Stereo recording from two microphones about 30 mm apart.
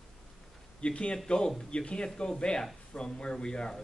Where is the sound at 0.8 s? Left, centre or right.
Left.